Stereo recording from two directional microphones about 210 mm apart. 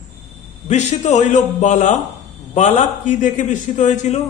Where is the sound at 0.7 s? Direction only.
35° left (ahead or behind).